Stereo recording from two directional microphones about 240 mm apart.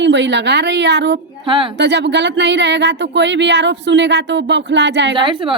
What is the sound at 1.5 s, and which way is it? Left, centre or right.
Speech, right.